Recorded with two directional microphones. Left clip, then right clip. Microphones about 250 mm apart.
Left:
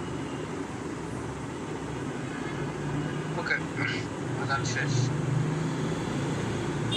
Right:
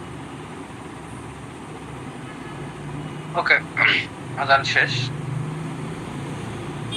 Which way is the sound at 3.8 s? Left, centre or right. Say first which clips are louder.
Right 12 dB; centre.